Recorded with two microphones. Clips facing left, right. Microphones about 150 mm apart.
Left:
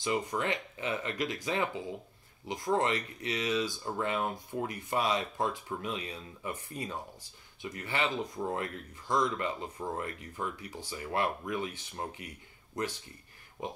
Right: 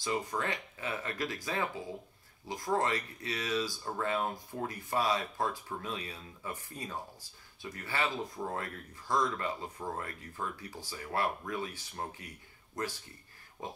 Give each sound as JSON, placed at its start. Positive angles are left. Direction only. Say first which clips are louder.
{"t": 0.0, "sound": "speech", "louder": "left 2 dB", "side_deg": 20}